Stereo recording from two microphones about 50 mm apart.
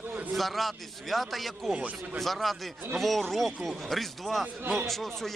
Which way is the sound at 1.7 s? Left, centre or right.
Right.